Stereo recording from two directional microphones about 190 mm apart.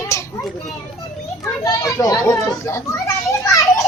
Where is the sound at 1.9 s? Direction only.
15° left (ahead or behind).